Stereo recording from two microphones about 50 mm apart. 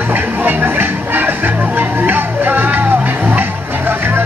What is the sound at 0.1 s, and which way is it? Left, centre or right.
Music, right.